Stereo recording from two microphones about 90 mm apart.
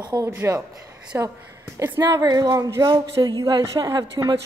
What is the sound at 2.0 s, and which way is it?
Speech, 45° right (ahead or behind).